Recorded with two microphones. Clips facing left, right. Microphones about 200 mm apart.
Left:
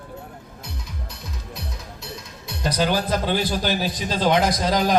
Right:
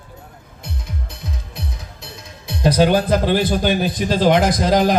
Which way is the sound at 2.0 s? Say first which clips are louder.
Left 1 dB; 55° right (ahead or behind).